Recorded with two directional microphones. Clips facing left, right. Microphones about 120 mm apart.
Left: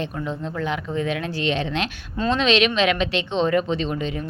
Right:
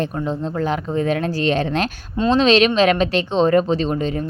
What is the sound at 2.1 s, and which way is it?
Speech, 30° right (ahead or behind).